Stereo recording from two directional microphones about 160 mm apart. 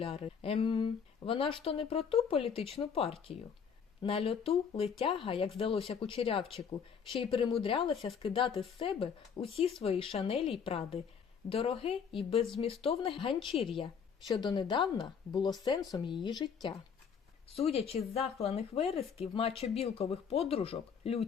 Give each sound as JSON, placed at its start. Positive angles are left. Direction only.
{"t": 0.0, "sound": "a woman's voice", "side_deg": 35}
{"t": 17.5, "sound": "speech", "side_deg": 40}